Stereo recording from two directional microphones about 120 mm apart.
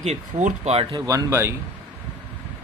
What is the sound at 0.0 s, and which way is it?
Speech, 70° right (ahead or behind).